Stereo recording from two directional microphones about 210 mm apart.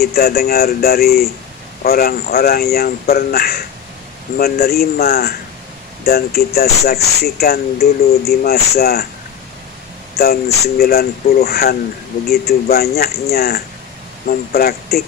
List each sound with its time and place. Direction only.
0.0 s speech: 50° left (ahead or behind)
10.1 s speech: 45° left (ahead or behind)